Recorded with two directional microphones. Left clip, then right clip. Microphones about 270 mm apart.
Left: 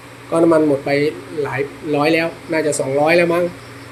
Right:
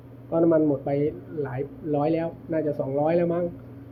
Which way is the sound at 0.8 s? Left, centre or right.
Centre.